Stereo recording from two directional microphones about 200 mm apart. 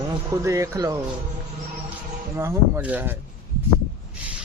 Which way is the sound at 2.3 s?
15° right (ahead or behind).